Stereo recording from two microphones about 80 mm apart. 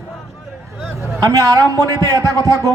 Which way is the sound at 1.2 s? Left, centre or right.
Right.